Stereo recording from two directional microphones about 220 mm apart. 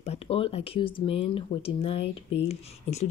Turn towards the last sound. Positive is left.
turn(degrees=30)  # may be behind; listen again after turning